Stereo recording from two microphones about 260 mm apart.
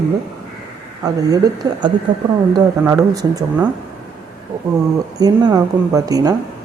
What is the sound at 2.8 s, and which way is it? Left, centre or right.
Speech, centre.